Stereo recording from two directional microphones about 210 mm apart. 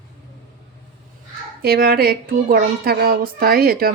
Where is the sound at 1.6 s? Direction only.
45° right (ahead or behind).